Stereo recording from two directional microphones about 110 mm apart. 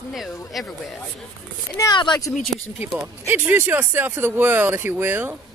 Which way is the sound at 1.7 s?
40° left (ahead or behind).